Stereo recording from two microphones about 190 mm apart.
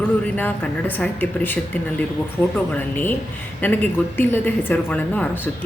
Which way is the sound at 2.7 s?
10° left (ahead or behind).